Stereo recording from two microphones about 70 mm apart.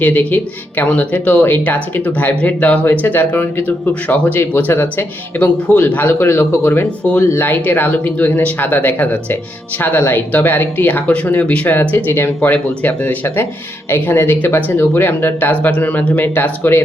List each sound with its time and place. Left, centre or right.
0.0 s speech: left
4.7 s speech: left
5.4 s speech: left
7.0 s speech: centre
7.3 s speech: left